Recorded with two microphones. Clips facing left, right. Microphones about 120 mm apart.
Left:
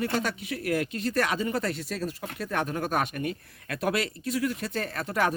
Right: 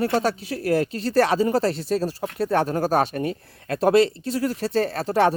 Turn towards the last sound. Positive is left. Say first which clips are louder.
# right 8 dB
turn(degrees=-30)  # may be behind; listen again after turning